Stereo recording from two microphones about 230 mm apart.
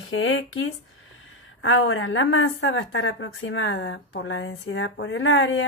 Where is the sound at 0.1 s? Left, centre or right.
Left.